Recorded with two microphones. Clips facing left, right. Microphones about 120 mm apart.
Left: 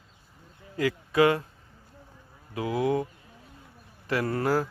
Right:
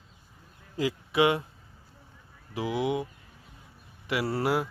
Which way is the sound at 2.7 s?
25° right (ahead or behind).